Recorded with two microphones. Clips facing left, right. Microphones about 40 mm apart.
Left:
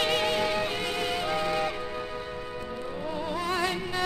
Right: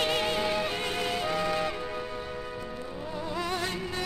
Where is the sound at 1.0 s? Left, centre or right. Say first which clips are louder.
Left 1 dB; centre.